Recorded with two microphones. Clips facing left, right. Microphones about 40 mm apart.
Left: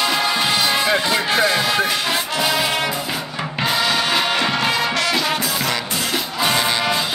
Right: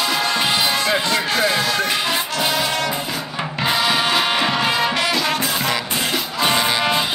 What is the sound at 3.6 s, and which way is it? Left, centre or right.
Music, centre.